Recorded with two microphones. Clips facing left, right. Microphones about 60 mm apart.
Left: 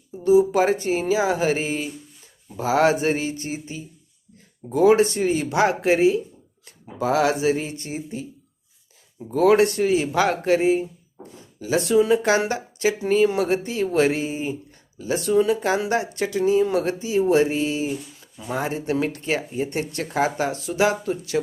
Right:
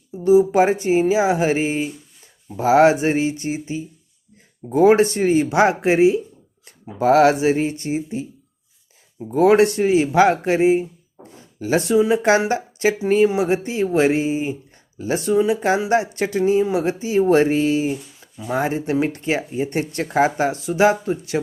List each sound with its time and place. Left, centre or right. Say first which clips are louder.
0.3 s speech: right 3 dB; right
6.7 s speech: right 7 dB; right
9.3 s speech: right 3 dB; right
11.6 s speech: right 2 dB; right
13.2 s speech: right 2 dB; centre
14.9 s speech: right 2 dB; right
15.3 s speech: right 1 dB; centre
15.9 s speech: right 4 dB; right